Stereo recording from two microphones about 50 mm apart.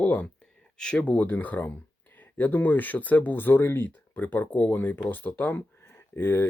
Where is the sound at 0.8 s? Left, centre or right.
Centre.